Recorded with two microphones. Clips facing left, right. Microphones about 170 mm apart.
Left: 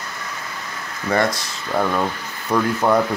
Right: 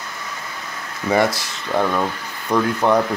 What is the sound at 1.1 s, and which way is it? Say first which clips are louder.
Speech: right 2 dB; 5° right (ahead or behind).